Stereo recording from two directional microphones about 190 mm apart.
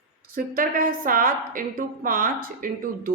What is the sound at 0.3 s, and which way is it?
A woman's voice, 45° right (ahead or behind).